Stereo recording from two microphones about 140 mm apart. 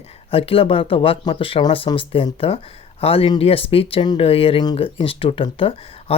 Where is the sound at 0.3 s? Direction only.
45° left (ahead or behind).